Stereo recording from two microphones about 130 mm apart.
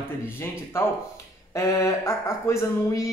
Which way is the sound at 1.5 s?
25° left (ahead or behind).